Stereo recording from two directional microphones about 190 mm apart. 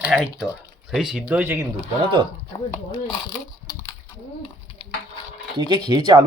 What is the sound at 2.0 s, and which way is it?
Speech, 25° right (ahead or behind).